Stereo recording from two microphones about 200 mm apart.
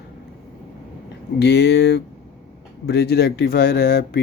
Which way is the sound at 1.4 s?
55° left (ahead or behind).